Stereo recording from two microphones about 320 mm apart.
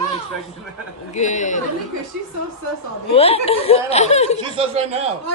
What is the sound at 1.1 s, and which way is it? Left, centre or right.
Speech, left.